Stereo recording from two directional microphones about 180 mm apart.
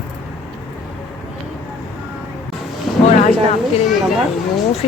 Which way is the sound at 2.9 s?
Centre (ahead or behind).